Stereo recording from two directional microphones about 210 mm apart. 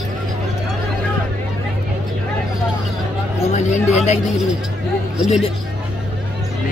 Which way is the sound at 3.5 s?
35° left (ahead or behind).